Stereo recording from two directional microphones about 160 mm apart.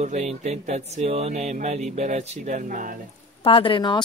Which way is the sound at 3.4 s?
30° left (ahead or behind).